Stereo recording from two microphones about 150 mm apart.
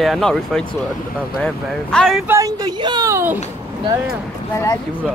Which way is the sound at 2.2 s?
20° right (ahead or behind).